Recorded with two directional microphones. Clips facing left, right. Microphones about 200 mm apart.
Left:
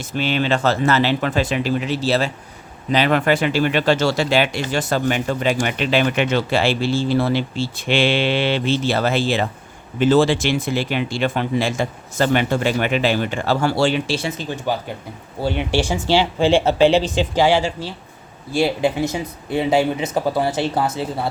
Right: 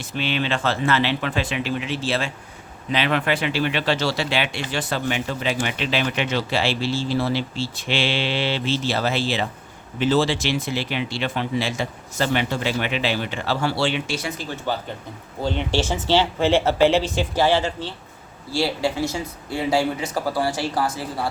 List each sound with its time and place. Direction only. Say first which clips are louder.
0.0 s speech: left 4 dB; 45° left (ahead or behind); by 21.2 s 25° left (ahead or behind)